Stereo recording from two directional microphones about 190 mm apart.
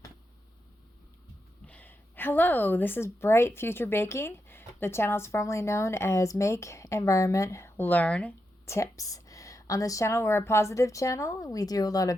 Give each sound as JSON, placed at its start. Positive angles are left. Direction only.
{"t": 1.6, "sound": "a woman's voice", "side_deg": 10}